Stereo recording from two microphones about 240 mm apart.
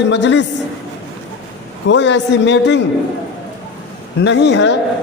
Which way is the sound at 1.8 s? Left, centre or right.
Left.